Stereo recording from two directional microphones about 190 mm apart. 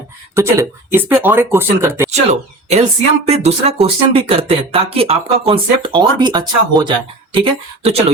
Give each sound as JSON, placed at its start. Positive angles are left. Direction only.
{"t": 0.3, "sound": "speech", "side_deg": -15}
{"t": 2.0, "sound": "speech", "side_deg": -35}